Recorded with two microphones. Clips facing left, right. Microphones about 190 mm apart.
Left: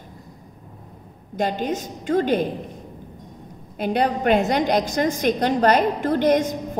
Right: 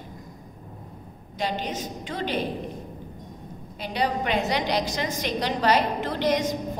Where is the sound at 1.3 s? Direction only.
50° left (ahead or behind).